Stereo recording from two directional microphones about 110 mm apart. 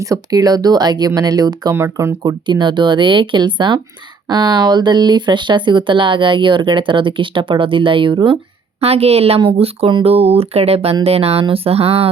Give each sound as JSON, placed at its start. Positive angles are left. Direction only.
{"t": 0.0, "sound": "speech", "side_deg": -30}
{"t": 1.7, "sound": "speech", "side_deg": -25}
{"t": 2.2, "sound": "speech", "side_deg": -45}
{"t": 8.8, "sound": "a woman's voice", "side_deg": -70}